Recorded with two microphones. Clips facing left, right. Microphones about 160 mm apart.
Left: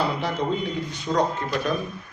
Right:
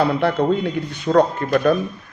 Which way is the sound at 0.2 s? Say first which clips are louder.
Right 7 dB; 60° right (ahead or behind).